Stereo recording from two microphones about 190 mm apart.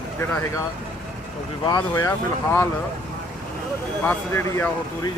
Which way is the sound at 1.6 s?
20° left (ahead or behind).